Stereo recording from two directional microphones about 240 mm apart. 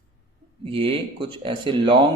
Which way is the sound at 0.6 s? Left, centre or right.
Right.